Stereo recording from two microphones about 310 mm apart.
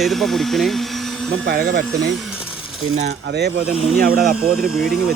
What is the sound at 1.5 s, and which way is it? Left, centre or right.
Speech, right.